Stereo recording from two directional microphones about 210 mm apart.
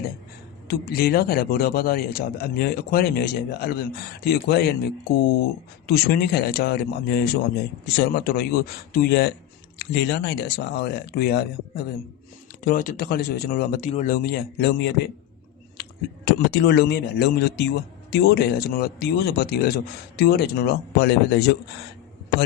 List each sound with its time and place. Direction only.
0.7 s a man's voice: 50° left (ahead or behind)